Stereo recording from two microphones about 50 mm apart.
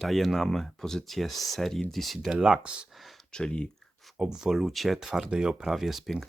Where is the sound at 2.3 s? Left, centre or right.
Centre.